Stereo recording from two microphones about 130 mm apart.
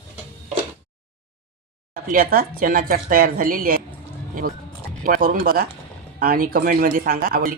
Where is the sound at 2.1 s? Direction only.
90° right.